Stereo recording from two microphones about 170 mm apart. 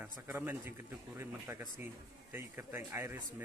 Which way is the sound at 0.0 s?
10° right (ahead or behind).